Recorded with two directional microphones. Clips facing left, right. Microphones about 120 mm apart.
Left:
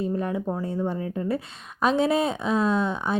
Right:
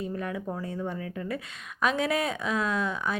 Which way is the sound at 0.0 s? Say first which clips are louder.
Left 6 dB; 30° left (ahead or behind).